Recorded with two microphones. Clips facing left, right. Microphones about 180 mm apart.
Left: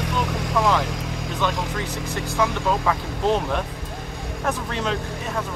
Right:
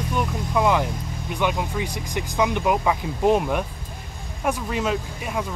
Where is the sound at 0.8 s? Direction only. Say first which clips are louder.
Left 1 dB; 90° left.